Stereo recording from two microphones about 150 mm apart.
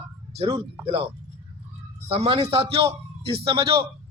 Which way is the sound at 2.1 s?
45° right (ahead or behind).